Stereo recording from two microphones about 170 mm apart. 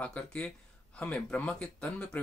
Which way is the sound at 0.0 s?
5° left (ahead or behind).